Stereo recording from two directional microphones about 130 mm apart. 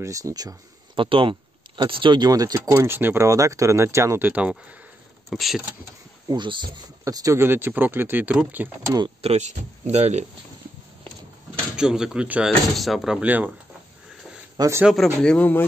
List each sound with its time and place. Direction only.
0.0 s speech: 25° right (ahead or behind)
0.9 s speech: 40° right (ahead or behind); by 4.6 s 10° right (ahead or behind)
5.3 s speech: centre (ahead or behind)
6.2 s speech: 35° right (ahead or behind); by 8.6 s 10° right (ahead or behind)
8.8 s speech: 30° right (ahead or behind)
9.2 s speech: 55° right (ahead or behind)
11.7 s speech: 5° right (ahead or behind)
14.6 s speech: 20° right (ahead or behind)
15.2 s speech: 10° left (ahead or behind)